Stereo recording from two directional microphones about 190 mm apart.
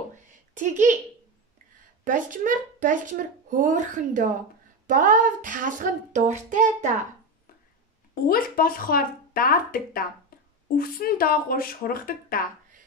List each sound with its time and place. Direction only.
0.6 s a woman's voice: 40° right (ahead or behind)
2.0 s speech: 45° right (ahead or behind)
8.1 s speech: 50° left (ahead or behind)